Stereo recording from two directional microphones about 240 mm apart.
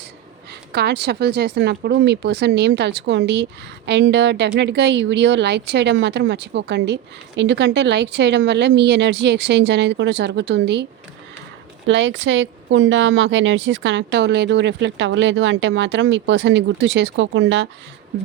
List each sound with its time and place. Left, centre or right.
0.7 s speech: right
11.9 s speech: right